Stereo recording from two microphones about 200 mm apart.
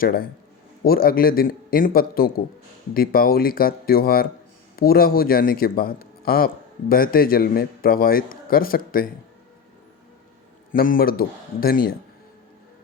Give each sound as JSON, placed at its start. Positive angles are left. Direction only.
{"t": 0.0, "sound": "speech", "side_deg": 45}
{"t": 10.7, "sound": "speech", "side_deg": 45}